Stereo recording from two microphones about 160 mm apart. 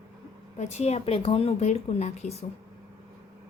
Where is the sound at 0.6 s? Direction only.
45° left (ahead or behind).